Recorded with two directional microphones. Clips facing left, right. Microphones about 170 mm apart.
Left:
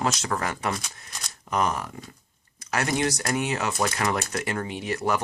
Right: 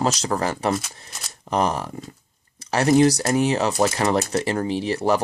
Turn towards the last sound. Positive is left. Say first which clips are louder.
# right 6 dB
turn(degrees=-30)  # may be behind; listen again after turning